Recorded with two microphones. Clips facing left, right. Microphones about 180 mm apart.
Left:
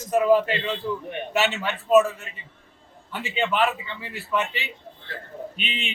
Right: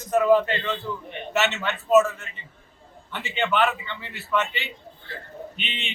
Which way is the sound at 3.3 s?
5° left (ahead or behind).